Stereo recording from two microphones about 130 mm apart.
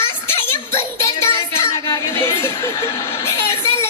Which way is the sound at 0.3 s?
20° left (ahead or behind).